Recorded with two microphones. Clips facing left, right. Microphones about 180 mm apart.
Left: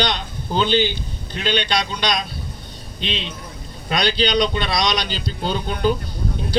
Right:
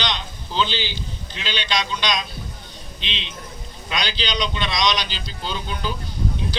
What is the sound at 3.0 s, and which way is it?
A man's voice, 45° left (ahead or behind).